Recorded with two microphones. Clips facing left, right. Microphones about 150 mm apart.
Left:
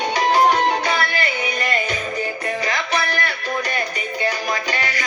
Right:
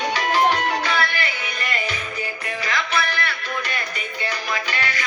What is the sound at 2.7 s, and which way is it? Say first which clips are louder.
Music: right 2 dB; 40° left (ahead or behind).